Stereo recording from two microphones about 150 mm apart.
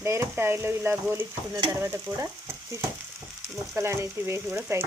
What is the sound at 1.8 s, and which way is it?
Frying, 15° right (ahead or behind).